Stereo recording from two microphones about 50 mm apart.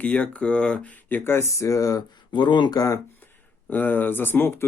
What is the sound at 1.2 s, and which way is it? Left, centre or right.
Speech, left.